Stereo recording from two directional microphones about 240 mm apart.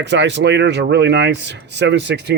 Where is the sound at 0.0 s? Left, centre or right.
Right.